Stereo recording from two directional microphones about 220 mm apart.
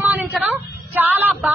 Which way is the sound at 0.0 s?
5° right (ahead or behind).